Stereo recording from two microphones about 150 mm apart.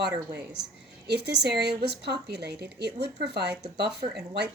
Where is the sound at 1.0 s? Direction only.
90° right.